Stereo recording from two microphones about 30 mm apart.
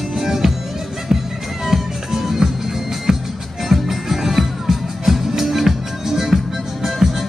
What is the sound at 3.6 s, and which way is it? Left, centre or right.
Music, centre.